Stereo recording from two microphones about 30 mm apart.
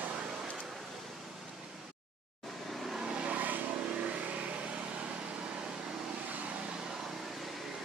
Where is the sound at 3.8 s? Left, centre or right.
Right.